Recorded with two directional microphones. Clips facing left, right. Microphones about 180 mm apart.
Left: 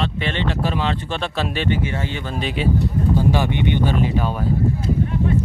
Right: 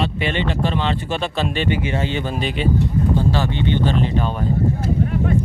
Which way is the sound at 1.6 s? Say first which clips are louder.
Right 1 dB; 15° right (ahead or behind).